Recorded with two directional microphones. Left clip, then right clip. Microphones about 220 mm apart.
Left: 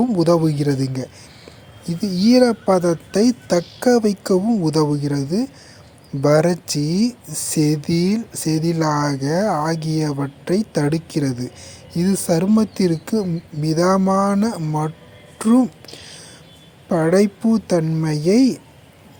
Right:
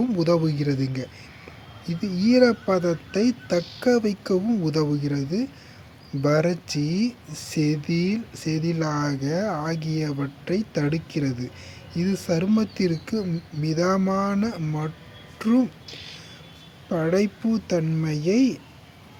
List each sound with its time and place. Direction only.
0.0 s speech: 15° left (ahead or behind)
15.4 s a sound: 15° left (ahead or behind)
16.9 s speech: 20° left (ahead or behind)